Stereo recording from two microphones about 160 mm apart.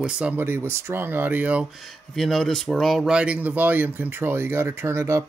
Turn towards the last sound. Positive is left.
turn(degrees=-15)  # may be behind; listen again after turning